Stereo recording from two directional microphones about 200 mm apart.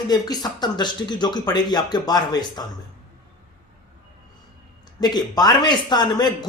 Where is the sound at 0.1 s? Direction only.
20° left (ahead or behind).